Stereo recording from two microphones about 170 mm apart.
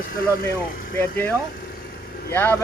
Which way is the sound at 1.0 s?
10° left (ahead or behind).